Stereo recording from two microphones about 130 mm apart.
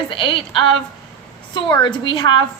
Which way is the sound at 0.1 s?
40° left (ahead or behind).